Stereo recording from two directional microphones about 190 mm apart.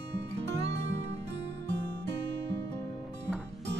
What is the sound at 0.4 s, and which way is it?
Music, 65° right (ahead or behind).